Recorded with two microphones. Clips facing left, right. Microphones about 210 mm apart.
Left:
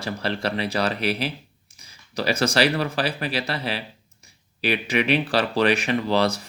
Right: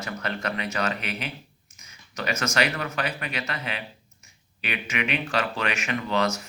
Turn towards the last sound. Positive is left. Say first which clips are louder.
# left 4 dB
turn(degrees=35)  # may be behind; listen again after turning